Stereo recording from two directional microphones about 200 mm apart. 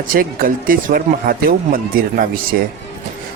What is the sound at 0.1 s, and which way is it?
Speech, 45° right (ahead or behind).